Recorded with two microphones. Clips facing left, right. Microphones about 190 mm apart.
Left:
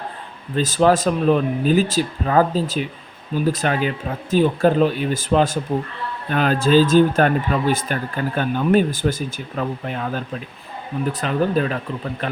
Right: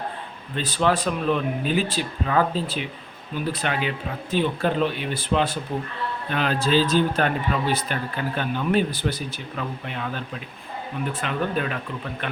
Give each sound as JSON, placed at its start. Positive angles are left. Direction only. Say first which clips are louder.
{"t": 0.5, "sound": "speech", "louder": "left 6 dB", "side_deg": 40}